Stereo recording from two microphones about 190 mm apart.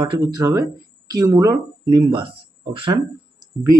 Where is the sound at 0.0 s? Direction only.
20° right (ahead or behind).